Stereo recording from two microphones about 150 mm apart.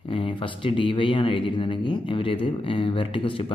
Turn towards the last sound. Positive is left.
turn(degrees=35)  # may be behind; listen again after turning